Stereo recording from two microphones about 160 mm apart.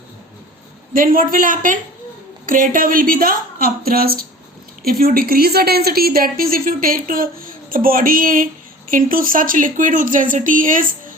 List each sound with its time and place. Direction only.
0.9 s a woman's voice: 60° right (ahead or behind)